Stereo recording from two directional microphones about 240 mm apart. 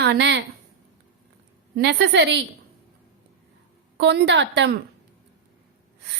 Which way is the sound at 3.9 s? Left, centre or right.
Right.